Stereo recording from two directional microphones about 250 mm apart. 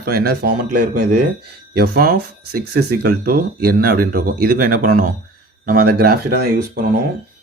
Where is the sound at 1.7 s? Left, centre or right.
Right.